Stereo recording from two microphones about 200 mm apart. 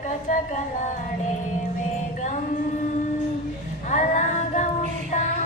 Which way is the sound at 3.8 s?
40° left (ahead or behind).